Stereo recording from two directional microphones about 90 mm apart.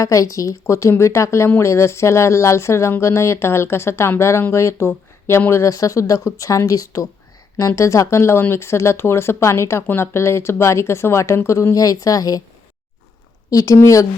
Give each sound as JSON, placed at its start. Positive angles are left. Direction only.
{"t": 0.0, "sound": "speech", "side_deg": 40}
{"t": 13.5, "sound": "speech", "side_deg": 40}